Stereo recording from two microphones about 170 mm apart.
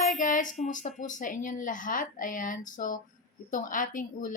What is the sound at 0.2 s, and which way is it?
A woman's voice, 50° left (ahead or behind).